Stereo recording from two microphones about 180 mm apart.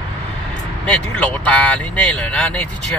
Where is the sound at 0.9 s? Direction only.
5° left (ahead or behind).